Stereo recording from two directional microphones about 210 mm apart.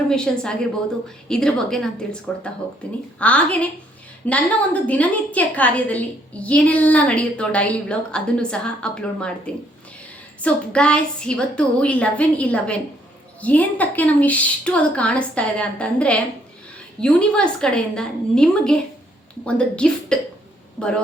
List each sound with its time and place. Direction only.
0.3 s a woman's voice: 5° left (ahead or behind)
3.2 s a woman's voice: 5° left (ahead or behind)